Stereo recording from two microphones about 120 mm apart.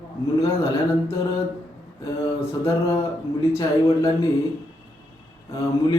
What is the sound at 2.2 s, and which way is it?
Speech, 25° left (ahead or behind).